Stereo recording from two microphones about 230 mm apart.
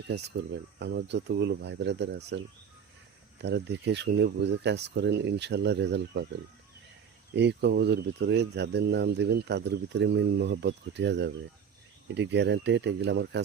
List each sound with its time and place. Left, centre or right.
0.8 s speech: right
3.4 s speech: right
7.3 s speech: right